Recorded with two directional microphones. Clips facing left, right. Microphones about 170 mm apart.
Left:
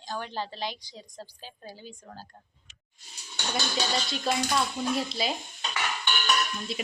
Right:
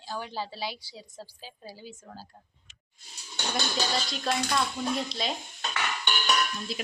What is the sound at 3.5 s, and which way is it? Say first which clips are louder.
A woman's voice: left 1 dB; centre (ahead or behind).